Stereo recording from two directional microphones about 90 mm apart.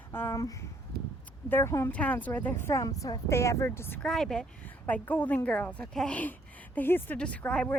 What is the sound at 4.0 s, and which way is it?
Speech, 5° left (ahead or behind).